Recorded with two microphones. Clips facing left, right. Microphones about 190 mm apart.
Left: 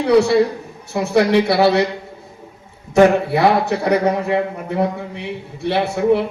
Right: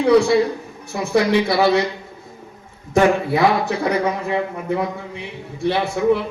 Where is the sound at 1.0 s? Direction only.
60° left (ahead or behind).